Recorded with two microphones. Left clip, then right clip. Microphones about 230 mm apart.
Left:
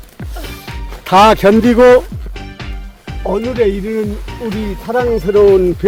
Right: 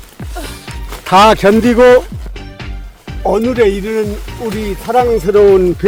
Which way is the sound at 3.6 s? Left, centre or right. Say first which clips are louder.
Right 3 dB; right.